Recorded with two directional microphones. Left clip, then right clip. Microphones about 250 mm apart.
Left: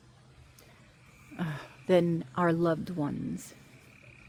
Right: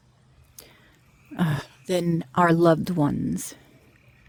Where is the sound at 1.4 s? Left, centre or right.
Right.